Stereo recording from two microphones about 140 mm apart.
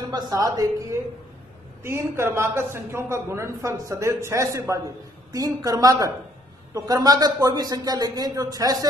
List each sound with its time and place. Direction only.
0.1 s a man's voice: 25° right (ahead or behind)